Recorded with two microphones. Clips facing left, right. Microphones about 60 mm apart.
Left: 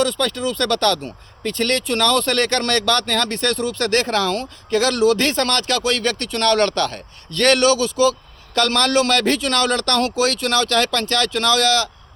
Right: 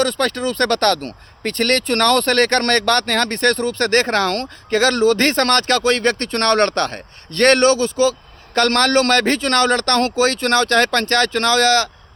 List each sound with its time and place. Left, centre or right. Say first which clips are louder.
0.0 s speech: right 1 dB; right
4.8 s speech: right 2 dB; right